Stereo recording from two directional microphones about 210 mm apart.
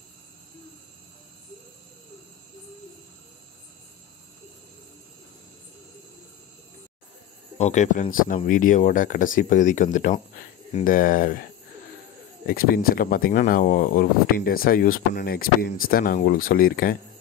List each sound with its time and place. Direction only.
7.5 s speech: 35° left (ahead or behind)
12.4 s speech: 45° left (ahead or behind)